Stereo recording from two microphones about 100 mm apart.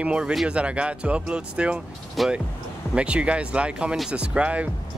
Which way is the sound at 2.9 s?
10° right (ahead or behind).